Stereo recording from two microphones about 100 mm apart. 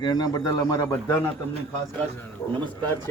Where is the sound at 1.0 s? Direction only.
25° left (ahead or behind).